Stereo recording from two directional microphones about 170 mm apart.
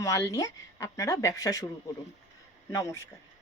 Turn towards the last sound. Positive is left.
turn(degrees=15)  # may be behind; listen again after turning